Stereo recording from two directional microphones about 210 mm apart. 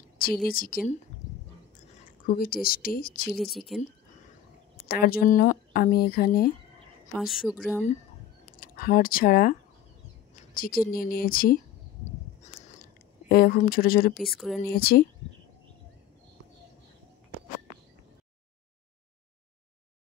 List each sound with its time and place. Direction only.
0.5 s speech: 45° left (ahead or behind)
2.0 s speech: 45° left (ahead or behind)
3.3 s a woman's voice: centre (ahead or behind)
4.7 s speech: 45° left (ahead or behind)
7.2 s a woman's voice: centre (ahead or behind)
8.5 s speech: 45° left (ahead or behind)
13.3 s speech: 45° left (ahead or behind)
14.1 s a woman's voice: centre (ahead or behind)
14.8 s speech: 45° left (ahead or behind)